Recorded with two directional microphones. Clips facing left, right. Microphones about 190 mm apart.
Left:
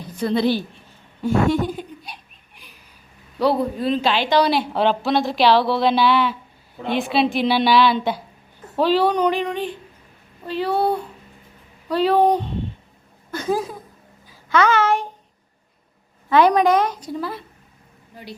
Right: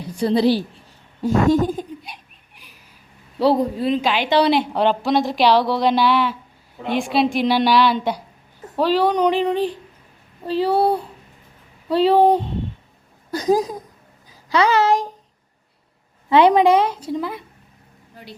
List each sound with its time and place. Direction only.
0.2 s speech: 35° right (ahead or behind)
3.3 s speech: 35° right (ahead or behind)
3.8 s a woman's voice: 10° right (ahead or behind)
4.3 s a woman's voice: 25° right (ahead or behind)
7.3 s a woman's voice: 10° right (ahead or behind)
9.3 s a woman's voice: 35° right (ahead or behind)
16.3 s a woman's voice: 25° right (ahead or behind)